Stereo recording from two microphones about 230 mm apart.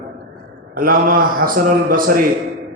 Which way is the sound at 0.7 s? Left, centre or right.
Right.